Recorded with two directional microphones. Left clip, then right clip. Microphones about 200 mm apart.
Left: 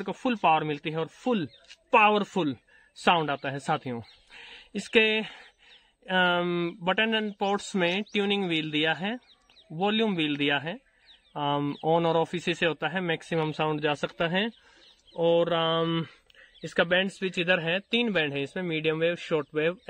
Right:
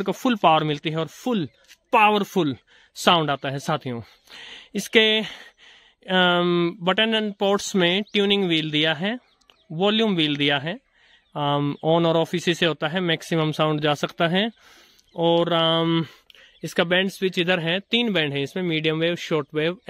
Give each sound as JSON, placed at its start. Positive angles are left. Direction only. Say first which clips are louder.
{"t": 0.0, "sound": "speech", "louder": "right 6 dB", "side_deg": -55}